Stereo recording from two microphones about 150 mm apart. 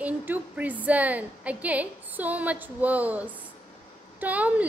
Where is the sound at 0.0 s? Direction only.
10° right (ahead or behind).